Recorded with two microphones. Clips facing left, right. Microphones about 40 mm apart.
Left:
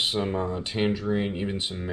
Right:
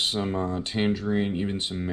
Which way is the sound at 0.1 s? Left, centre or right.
Centre.